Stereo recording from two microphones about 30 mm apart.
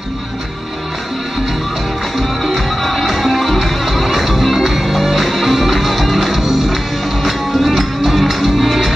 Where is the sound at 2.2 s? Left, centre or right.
Centre.